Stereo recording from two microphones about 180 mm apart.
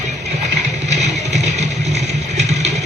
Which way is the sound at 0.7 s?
40° right (ahead or behind).